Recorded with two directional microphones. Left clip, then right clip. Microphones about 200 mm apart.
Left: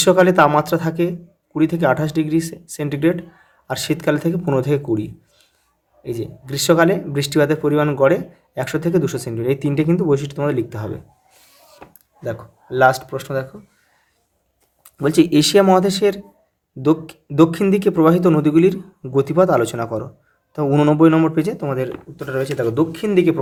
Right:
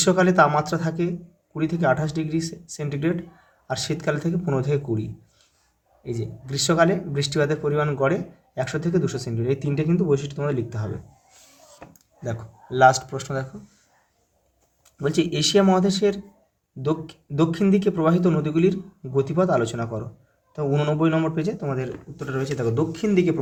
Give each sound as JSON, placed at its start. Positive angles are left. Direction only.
{"t": 0.0, "sound": "speech", "side_deg": 30}
{"t": 12.2, "sound": "speech", "side_deg": 20}
{"t": 14.8, "sound": "speech", "side_deg": 35}